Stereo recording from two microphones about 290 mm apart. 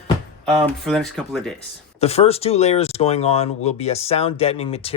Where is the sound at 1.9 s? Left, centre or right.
Left.